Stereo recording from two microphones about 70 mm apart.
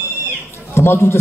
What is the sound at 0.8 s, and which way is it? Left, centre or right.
Speech, left.